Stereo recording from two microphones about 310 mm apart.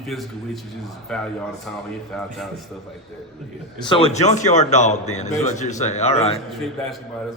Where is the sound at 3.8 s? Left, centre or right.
Centre.